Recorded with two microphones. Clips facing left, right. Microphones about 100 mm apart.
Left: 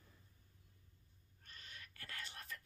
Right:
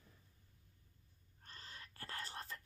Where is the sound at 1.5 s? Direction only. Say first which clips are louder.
Right 2 dB; 35° right (ahead or behind).